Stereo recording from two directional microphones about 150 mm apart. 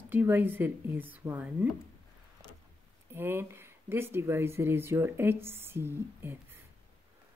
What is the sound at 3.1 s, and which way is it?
Speech, 15° right (ahead or behind).